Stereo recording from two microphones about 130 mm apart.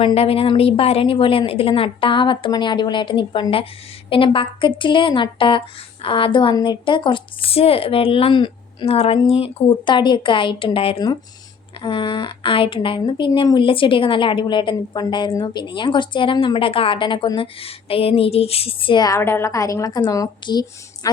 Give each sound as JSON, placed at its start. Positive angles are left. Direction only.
{"t": 0.0, "sound": "a woman's voice", "side_deg": 50}